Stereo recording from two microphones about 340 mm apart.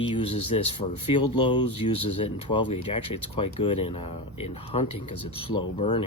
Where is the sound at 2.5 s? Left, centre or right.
Centre.